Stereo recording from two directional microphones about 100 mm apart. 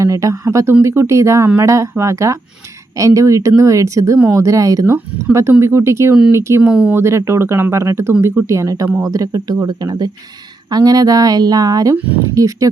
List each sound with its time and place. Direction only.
0.0 s speech: 35° right (ahead or behind)
6.6 s speech: 10° right (ahead or behind)
6.9 s speech: 30° right (ahead or behind)
11.9 s speech: 15° right (ahead or behind)
12.3 s speech: 35° right (ahead or behind)